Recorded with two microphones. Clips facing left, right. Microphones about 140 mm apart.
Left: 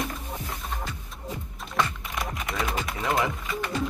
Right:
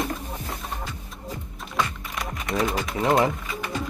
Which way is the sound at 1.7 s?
Centre (ahead or behind).